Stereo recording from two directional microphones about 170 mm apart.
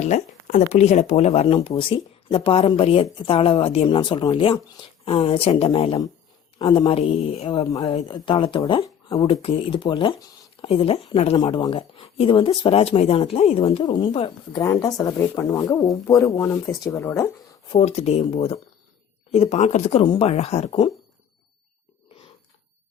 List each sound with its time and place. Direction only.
0.0 s speech: 45° left (ahead or behind)
7.6 s speech: 20° left (ahead or behind)
17.7 s speech: 40° left (ahead or behind)